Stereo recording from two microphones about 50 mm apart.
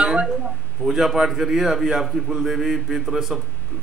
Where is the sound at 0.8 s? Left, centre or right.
Centre.